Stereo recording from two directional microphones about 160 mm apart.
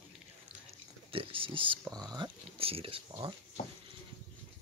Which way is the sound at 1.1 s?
35° right (ahead or behind).